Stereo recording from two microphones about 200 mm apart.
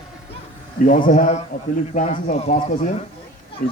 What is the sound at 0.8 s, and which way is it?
Speech, 40° left (ahead or behind).